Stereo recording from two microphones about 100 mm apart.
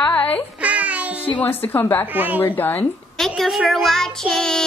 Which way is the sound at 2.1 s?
20° right (ahead or behind).